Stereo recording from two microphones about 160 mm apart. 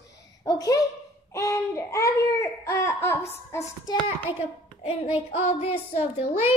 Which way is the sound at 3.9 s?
25° left (ahead or behind).